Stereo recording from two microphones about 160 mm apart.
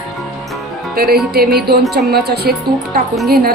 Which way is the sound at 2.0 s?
85° right.